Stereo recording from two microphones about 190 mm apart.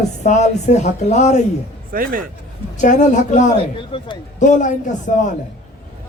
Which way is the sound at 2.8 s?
40° left (ahead or behind).